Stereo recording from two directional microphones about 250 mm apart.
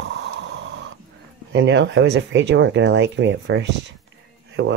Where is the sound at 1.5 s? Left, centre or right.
Right.